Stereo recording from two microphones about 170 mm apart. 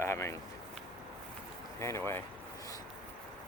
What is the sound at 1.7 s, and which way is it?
Speech, 15° left (ahead or behind).